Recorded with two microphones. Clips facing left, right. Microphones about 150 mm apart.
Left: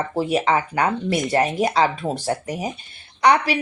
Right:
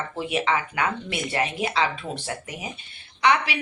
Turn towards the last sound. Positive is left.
turn(degrees=40)  # may be behind; listen again after turning